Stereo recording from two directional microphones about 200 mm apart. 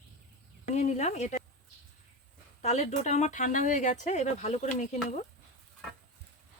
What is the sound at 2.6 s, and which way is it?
Speech, 35° left (ahead or behind).